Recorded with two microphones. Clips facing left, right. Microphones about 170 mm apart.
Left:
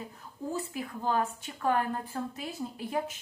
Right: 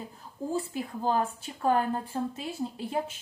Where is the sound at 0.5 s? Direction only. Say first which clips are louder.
Right 4 dB; 30° right (ahead or behind).